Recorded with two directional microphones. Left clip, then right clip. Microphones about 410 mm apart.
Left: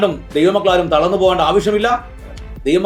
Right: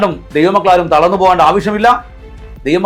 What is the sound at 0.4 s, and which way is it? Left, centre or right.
A man's voice, centre.